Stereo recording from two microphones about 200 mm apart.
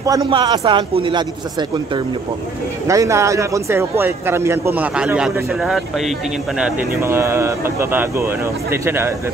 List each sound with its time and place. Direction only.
0.0 s a man's voice: 20° right (ahead or behind)
2.9 s a man's voice: 15° right (ahead or behind)